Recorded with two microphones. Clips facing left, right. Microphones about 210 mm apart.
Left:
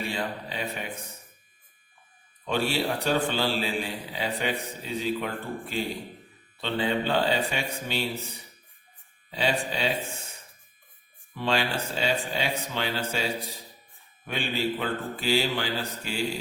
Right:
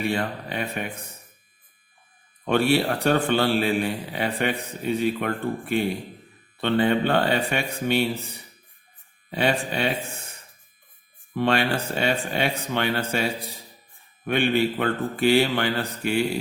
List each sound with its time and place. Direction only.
0.0 s a man's voice: 60° right (ahead or behind)
2.4 s a man's voice: 60° right (ahead or behind)
9.3 s a man's voice: 60° right (ahead or behind)
11.3 s a man's voice: 60° right (ahead or behind)
14.3 s a man's voice: 60° right (ahead or behind)